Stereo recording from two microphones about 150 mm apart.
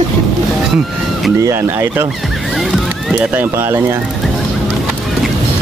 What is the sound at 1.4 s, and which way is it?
Speech, 20° right (ahead or behind).